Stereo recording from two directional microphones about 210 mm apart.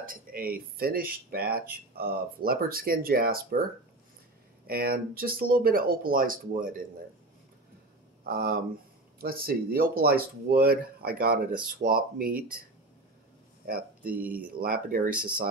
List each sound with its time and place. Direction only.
0.0 s speech: 40° right (ahead or behind)
4.6 s speech: 45° right (ahead or behind)
8.2 s speech: 45° right (ahead or behind)
14.0 s speech: 5° right (ahead or behind)
14.5 s speech: 45° right (ahead or behind)